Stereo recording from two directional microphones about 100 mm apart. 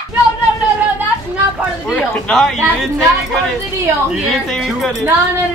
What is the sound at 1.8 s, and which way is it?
Speech, 15° left (ahead or behind).